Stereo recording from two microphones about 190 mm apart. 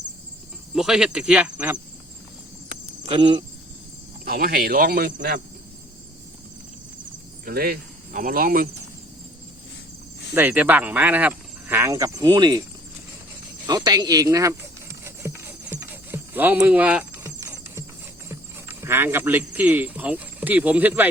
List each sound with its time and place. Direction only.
0.7 s cricket: centre (ahead or behind)
3.1 s speech: 25° right (ahead or behind)
4.3 s speech: 50° right (ahead or behind)
7.4 s speech: 50° right (ahead or behind)
10.3 s speech: 10° right (ahead or behind)
13.7 s speech: 20° right (ahead or behind)
15.0 s a sound: 15° right (ahead or behind)
18.3 s speech: 10° right (ahead or behind)